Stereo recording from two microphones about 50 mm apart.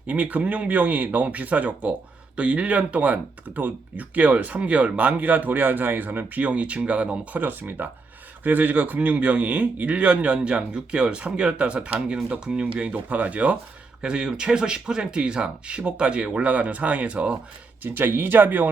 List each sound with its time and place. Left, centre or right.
0.1 s speech: right
7.3 s speech: right
14.0 s speech: centre
17.8 s speech: right